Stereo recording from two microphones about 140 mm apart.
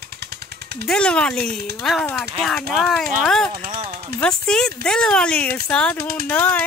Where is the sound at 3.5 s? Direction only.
40° right (ahead or behind).